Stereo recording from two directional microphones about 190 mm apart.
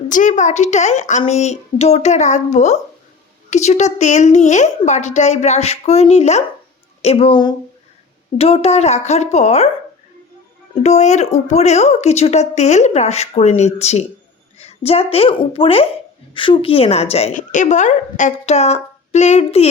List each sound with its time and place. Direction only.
0.1 s speech: 40° left (ahead or behind)
10.8 s speech: 35° left (ahead or behind)